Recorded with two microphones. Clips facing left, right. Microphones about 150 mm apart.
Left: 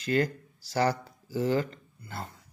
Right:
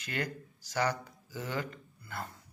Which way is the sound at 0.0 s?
30° left (ahead or behind).